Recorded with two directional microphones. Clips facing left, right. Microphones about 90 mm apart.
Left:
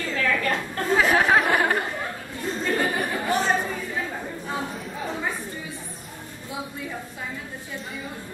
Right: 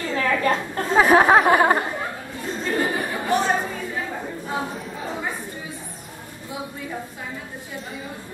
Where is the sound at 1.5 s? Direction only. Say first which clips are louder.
Right 5 dB; 25° right (ahead or behind).